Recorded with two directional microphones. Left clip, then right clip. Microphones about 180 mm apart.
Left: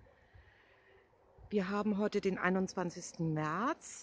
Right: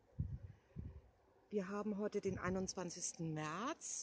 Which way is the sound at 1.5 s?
35° left (ahead or behind).